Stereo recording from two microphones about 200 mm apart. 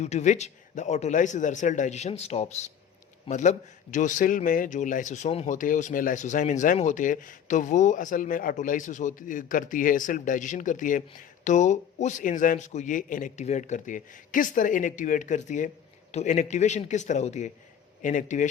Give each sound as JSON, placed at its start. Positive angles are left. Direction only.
{"t": 0.0, "sound": "a man's voice", "side_deg": 35}